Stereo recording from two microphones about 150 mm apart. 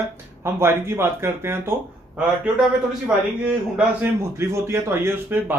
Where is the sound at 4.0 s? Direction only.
15° right (ahead or behind).